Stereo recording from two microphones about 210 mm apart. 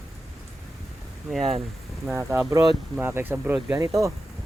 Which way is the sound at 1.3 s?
Centre (ahead or behind).